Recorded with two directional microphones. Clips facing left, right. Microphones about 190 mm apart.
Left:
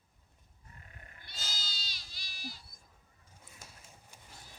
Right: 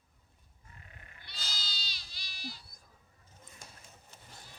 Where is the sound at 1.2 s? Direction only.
45° left (ahead or behind).